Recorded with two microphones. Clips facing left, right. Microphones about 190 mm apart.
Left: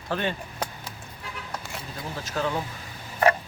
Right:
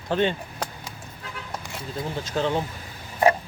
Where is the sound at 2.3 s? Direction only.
25° right (ahead or behind).